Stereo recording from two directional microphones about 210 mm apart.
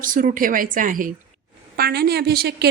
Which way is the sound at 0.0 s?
40° right (ahead or behind).